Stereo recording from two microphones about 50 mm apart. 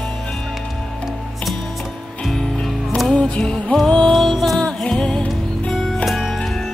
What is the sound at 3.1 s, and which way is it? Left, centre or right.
Music, left.